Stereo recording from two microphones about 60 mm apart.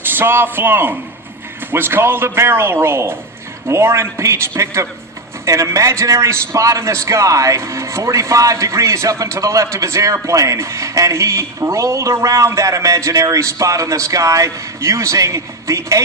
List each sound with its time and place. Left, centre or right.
0.0 s a man's voice: right